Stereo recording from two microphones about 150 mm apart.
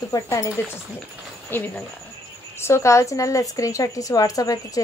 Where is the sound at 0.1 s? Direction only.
20° left (ahead or behind).